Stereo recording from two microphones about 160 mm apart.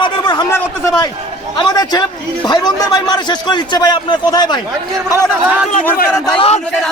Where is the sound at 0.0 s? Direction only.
30° left (ahead or behind).